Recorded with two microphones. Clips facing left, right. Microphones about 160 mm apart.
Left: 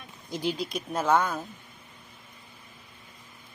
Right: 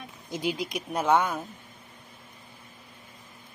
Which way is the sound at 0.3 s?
15° right (ahead or behind).